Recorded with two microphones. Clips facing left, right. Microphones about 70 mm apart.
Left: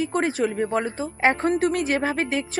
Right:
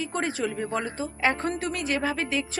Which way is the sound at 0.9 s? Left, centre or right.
Left.